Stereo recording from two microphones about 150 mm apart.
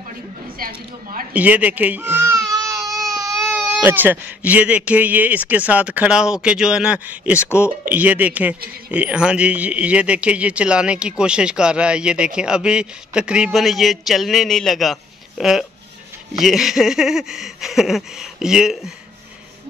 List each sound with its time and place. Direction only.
0.6 s speech: 75° right (ahead or behind)
1.3 s speech: 10° right (ahead or behind)
2.5 s baby cry: 25° right (ahead or behind)
3.8 s speech: 15° right (ahead or behind)